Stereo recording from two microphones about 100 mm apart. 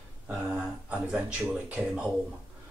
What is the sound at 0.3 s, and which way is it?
Speech, 10° right (ahead or behind).